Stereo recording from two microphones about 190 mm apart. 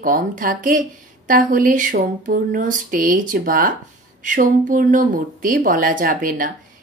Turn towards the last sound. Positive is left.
turn(degrees=-45)  # may be behind; listen again after turning